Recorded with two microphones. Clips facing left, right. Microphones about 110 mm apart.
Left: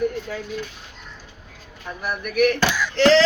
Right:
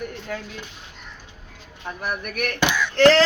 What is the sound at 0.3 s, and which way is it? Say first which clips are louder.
Speech: even; 50° right (ahead or behind).